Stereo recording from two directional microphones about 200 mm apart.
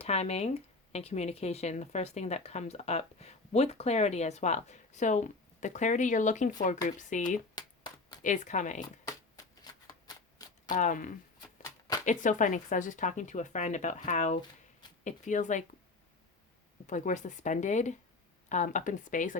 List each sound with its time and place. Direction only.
0.0 s speech: 30° left (ahead or behind)
7.5 s a sound: 20° left (ahead or behind)
8.2 s speech: 40° left (ahead or behind)
9.8 s shuffling cards: 20° left (ahead or behind)
10.7 s speech: 40° left (ahead or behind)
16.8 s speech: 40° left (ahead or behind)